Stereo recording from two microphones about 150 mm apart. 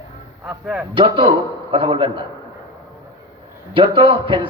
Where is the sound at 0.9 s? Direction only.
35° right (ahead or behind).